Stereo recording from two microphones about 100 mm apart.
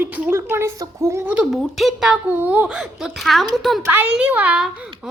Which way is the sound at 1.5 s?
Centre (ahead or behind).